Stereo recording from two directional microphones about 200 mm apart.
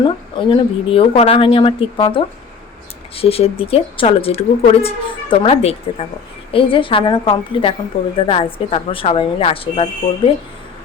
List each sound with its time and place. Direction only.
0.0 s speech: 25° left (ahead or behind)